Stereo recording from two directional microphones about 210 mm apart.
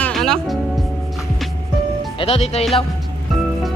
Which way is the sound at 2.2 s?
30° left (ahead or behind).